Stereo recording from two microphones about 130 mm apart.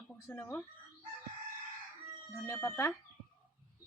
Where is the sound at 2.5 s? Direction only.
20° left (ahead or behind).